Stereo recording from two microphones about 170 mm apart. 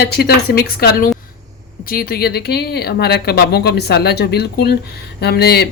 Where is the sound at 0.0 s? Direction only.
70° left (ahead or behind).